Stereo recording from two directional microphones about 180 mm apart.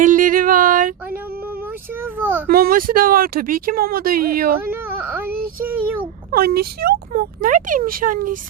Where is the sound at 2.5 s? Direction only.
55° right (ahead or behind).